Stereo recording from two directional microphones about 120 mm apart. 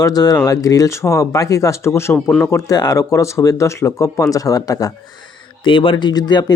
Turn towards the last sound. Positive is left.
turn(degrees=35)  # may be behind; listen again after turning